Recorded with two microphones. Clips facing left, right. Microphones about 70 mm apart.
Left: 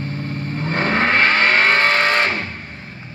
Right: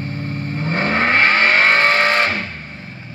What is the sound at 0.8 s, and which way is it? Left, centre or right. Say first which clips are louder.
Vehicle: even; left.